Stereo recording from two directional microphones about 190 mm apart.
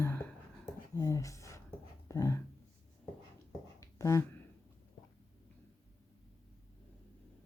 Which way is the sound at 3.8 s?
15° left (ahead or behind).